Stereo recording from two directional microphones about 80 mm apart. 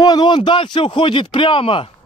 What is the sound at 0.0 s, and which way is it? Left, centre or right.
Speech, left.